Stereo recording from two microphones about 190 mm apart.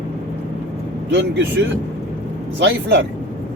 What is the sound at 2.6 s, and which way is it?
Speech, 65° right (ahead or behind).